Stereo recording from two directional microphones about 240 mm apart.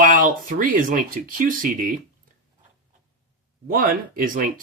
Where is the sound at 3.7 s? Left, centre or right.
Right.